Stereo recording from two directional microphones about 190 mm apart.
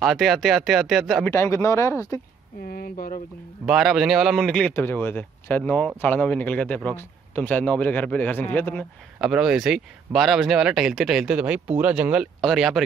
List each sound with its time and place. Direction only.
0.0 s speech: centre (ahead or behind)
1.3 s a man's voice: 15° left (ahead or behind)
2.6 s speech: 50° left (ahead or behind)
3.6 s a man's voice: centre (ahead or behind)
9.2 s speech: 5° right (ahead or behind)